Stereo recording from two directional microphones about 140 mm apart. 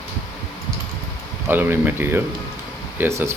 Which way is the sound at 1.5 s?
15° right (ahead or behind).